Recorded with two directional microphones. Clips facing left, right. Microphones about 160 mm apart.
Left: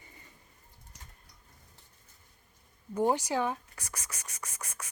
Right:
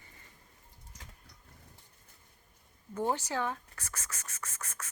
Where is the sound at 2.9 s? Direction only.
15° left (ahead or behind).